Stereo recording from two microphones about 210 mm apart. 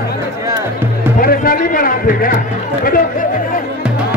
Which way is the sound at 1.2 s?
40° left (ahead or behind).